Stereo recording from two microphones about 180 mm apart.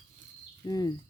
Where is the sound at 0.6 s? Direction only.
20° left (ahead or behind).